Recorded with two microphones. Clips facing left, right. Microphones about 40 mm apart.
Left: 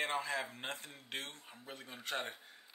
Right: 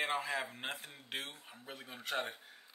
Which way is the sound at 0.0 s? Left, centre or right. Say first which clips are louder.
Right 1 dB; centre.